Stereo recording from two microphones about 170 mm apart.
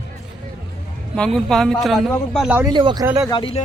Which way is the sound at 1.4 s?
5° left (ahead or behind).